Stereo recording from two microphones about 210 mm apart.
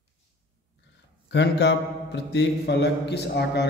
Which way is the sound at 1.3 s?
55° left (ahead or behind).